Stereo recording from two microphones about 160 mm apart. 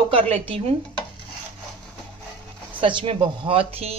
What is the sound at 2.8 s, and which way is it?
A woman's voice, 30° right (ahead or behind).